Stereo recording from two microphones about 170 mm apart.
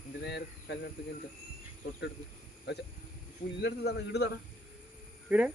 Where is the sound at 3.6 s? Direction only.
80° left.